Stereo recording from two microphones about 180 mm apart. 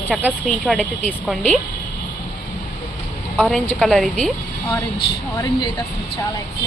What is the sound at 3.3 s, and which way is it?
Speech, centre (ahead or behind).